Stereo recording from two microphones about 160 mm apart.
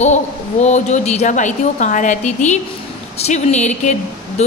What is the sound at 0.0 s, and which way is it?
A woman's voice, 45° left (ahead or behind).